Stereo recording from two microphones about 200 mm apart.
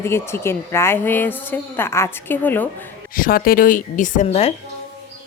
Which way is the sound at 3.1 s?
45° left (ahead or behind).